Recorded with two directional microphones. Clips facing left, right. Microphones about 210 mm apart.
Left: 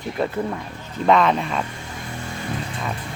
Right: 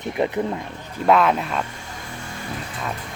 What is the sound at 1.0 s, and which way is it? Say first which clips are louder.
Speech: even; 5° right (ahead or behind).